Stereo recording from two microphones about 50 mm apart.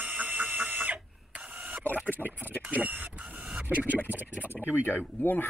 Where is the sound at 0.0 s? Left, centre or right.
Right.